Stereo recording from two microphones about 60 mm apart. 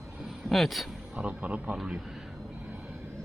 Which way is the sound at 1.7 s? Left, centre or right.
Centre.